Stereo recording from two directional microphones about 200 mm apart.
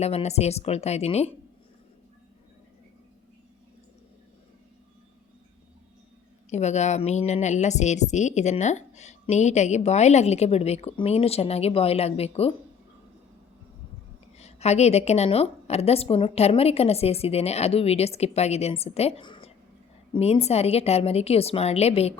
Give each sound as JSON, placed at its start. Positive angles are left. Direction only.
{"t": 0.0, "sound": "a woman's voice", "side_deg": 30}
{"t": 6.5, "sound": "a woman's voice", "side_deg": 35}
{"t": 14.3, "sound": "a woman's voice", "side_deg": 35}